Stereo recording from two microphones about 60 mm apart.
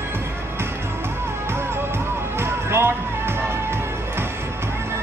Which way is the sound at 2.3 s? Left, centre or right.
Right.